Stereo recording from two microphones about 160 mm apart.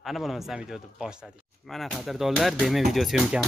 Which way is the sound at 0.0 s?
Centre (ahead or behind).